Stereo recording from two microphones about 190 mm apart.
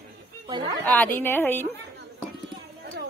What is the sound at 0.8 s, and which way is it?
Speech, 10° left (ahead or behind).